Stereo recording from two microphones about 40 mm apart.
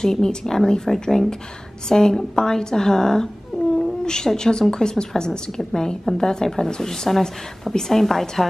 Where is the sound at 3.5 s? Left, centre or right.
Centre.